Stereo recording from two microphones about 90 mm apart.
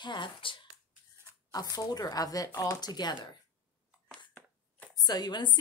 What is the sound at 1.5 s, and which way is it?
A woman's voice, 45° left (ahead or behind).